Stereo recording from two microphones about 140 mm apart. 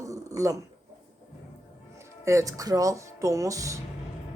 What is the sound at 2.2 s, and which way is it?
Speech, 25° right (ahead or behind).